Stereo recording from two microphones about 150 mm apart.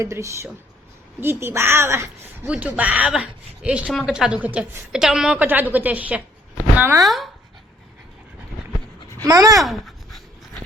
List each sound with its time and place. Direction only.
0.0 s a woman's voice: 20° right (ahead or behind)
7.0 s speech: centre (ahead or behind)
9.1 s speech: 20° right (ahead or behind)
9.6 s a sound: centre (ahead or behind)